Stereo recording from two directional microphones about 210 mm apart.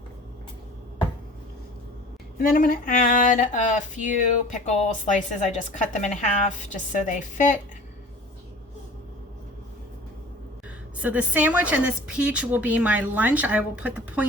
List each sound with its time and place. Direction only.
2.4 s a woman's voice: 40° left (ahead or behind)
11.0 s a woman's voice: 5° right (ahead or behind)